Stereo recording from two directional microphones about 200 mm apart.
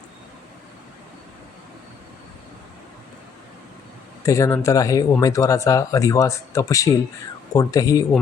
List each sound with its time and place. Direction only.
4.2 s speech: 15° left (ahead or behind)